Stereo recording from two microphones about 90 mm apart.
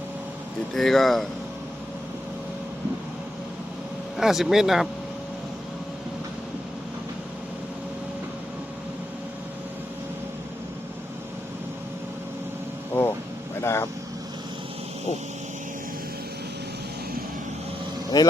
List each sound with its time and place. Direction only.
0.7 s speech: 5° left (ahead or behind)
4.2 s speech: 5° right (ahead or behind)
12.9 s vehicle: 25° left (ahead or behind)
18.1 s vehicle: 45° left (ahead or behind)